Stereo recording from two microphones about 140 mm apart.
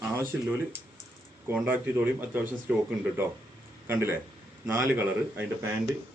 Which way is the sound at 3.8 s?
15° right (ahead or behind).